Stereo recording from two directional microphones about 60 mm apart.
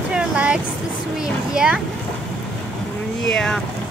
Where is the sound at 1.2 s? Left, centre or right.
Centre.